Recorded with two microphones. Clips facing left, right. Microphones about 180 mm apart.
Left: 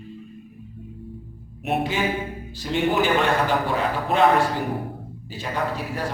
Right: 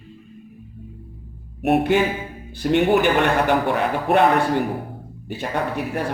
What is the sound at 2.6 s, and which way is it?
A man's voice, 60° right (ahead or behind).